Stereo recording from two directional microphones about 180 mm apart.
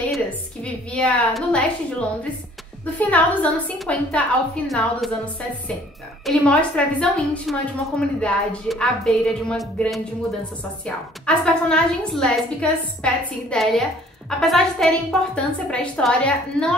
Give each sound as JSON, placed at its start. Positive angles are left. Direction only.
{"t": 0.9, "sound": "a woman's voice", "side_deg": 5}
{"t": 6.2, "sound": "a woman's voice", "side_deg": 5}
{"t": 11.2, "sound": "a woman's voice", "side_deg": 5}